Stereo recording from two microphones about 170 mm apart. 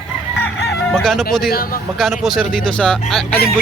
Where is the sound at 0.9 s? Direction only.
5° left (ahead or behind).